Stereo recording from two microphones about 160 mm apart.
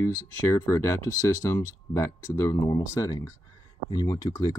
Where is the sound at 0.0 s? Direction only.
15° left (ahead or behind).